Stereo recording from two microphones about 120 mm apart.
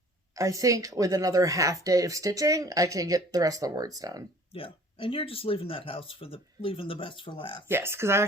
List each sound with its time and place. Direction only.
0.3 s speech: 25° right (ahead or behind)
4.5 s speech: 50° left (ahead or behind)
7.7 s speech: 20° right (ahead or behind)